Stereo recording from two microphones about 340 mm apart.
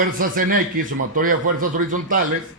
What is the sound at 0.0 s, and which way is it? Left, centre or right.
A man's voice, right.